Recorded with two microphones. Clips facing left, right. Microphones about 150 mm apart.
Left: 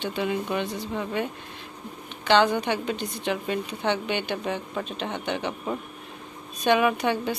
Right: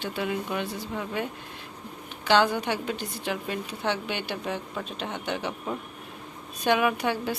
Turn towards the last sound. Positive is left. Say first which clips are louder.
# left 2 dB
turn(degrees=-5)  # may be behind; listen again after turning